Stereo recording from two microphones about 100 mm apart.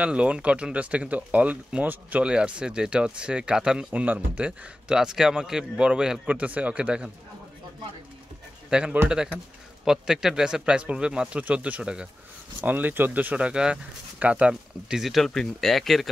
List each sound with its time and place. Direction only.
0.0 s speech: 10° right (ahead or behind)
8.6 s a man's voice: 10° right (ahead or behind)